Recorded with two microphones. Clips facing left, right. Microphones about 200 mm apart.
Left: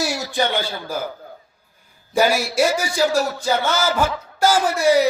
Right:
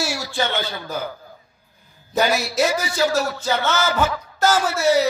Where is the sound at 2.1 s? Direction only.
10° left (ahead or behind).